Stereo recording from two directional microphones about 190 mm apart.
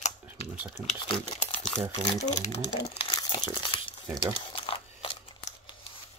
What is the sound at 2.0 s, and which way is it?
Speech, 40° left (ahead or behind).